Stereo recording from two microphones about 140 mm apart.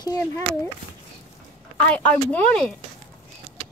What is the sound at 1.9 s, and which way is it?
Speech, 10° left (ahead or behind).